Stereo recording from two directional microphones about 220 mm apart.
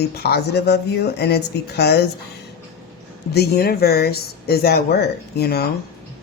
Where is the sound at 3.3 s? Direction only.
45° left (ahead or behind).